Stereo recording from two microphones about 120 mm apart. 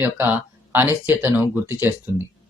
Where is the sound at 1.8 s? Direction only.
15° right (ahead or behind).